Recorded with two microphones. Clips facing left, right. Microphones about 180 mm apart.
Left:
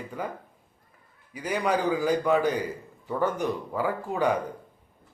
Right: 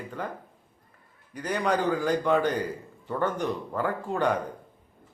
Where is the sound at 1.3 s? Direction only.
10° left (ahead or behind).